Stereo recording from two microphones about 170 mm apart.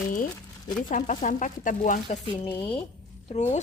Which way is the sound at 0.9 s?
50° left (ahead or behind).